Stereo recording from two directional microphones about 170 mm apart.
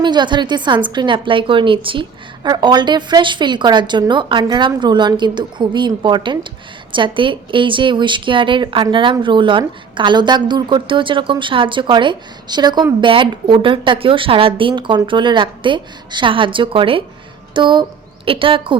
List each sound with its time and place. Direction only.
0.0 s a woman's voice: 25° right (ahead or behind)